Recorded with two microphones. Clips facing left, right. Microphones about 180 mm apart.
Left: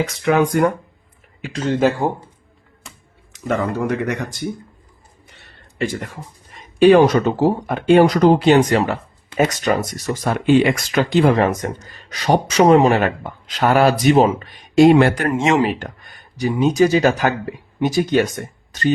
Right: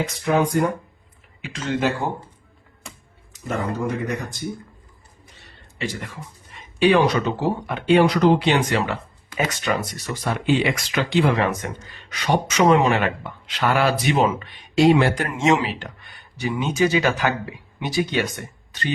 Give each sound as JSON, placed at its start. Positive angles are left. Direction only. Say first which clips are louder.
{"t": 0.2, "sound": "speech", "louder": "left 4 dB", "side_deg": 75}
{"t": 1.4, "sound": "speech", "louder": "left 6 dB", "side_deg": 40}
{"t": 3.3, "sound": "speech", "louder": "left 5 dB", "side_deg": 70}
{"t": 5.8, "sound": "speech", "louder": "left 6 dB", "side_deg": 50}